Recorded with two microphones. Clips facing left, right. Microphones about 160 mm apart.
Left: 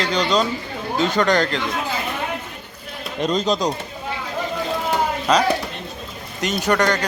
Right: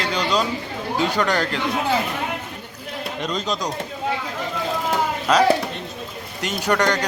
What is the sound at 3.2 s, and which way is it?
Speech, 25° left (ahead or behind).